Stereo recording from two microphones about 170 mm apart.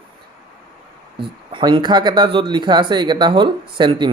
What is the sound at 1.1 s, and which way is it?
Speech, 30° right (ahead or behind).